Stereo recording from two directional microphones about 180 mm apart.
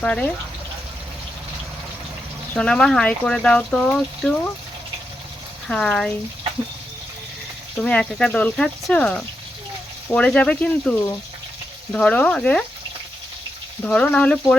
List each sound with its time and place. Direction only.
0.0 s speech: 5° left (ahead or behind)
2.5 s speech: 5° left (ahead or behind)
5.6 s speech: 5° left (ahead or behind)
7.8 s speech: 5° left (ahead or behind)
13.8 s speech: 5° left (ahead or behind)